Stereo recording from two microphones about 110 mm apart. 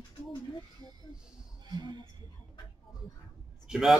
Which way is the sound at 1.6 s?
45° right (ahead or behind).